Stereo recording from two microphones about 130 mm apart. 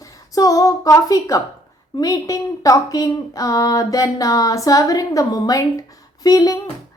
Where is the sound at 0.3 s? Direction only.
25° left (ahead or behind).